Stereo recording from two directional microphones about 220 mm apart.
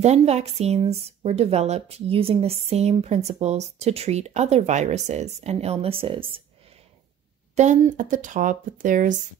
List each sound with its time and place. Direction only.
0.0 s speech: 30° right (ahead or behind)
7.5 s speech: 30° right (ahead or behind)